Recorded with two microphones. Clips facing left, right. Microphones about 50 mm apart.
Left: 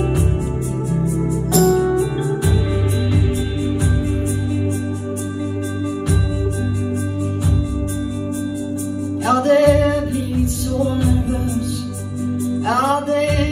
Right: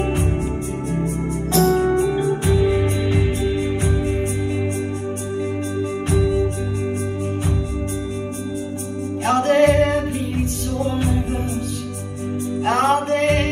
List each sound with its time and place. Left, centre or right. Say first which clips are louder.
1.5 s music: left 1 dB; right
9.2 s music: left 2 dB; right
12.6 s music: right 1 dB; right